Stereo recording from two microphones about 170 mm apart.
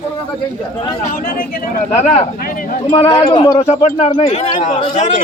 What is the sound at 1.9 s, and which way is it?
A man's voice, 40° left (ahead or behind).